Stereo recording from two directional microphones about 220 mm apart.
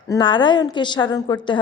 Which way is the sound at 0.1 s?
20° left (ahead or behind).